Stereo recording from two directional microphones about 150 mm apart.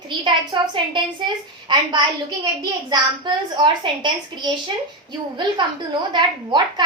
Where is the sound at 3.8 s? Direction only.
30° right (ahead or behind).